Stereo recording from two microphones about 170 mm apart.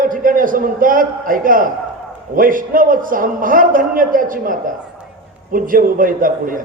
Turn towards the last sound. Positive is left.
turn(degrees=-55)  # may be behind; listen again after turning